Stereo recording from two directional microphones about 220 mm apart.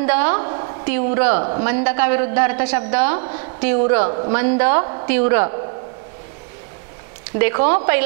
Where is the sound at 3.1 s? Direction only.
25° right (ahead or behind).